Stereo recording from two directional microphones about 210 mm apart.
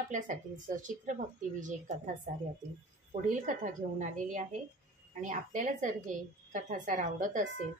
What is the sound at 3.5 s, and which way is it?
A woman's voice, 35° right (ahead or behind).